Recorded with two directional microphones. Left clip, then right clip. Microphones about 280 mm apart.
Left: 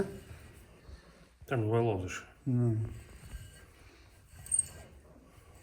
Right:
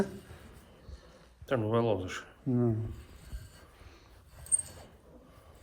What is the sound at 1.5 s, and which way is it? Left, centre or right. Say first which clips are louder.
Speech: right 2 dB; right.